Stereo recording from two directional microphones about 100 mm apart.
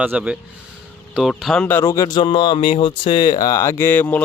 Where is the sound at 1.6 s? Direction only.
20° left (ahead or behind).